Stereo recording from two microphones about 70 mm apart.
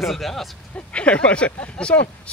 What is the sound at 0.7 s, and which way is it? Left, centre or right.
Speech, centre.